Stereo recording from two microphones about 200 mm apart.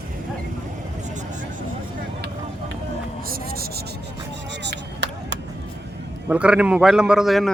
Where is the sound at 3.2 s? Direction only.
50° right (ahead or behind).